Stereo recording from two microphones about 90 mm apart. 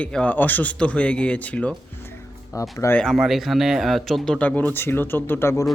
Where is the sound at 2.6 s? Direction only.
30° left (ahead or behind).